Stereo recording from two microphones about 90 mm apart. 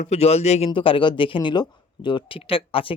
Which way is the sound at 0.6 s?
90° left.